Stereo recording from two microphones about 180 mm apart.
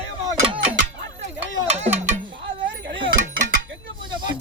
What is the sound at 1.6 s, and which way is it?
Music, 35° right (ahead or behind).